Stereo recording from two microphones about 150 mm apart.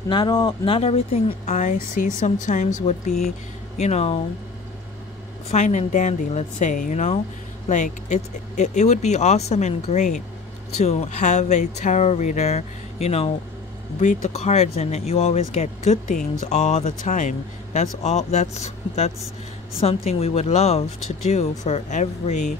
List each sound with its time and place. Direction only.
0.1 s speech: 25° left (ahead or behind)
0.7 s speech: 40° left (ahead or behind)
5.5 s speech: 50° left (ahead or behind)